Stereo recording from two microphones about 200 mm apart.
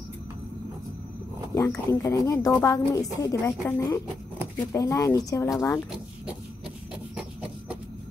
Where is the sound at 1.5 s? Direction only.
15° left (ahead or behind).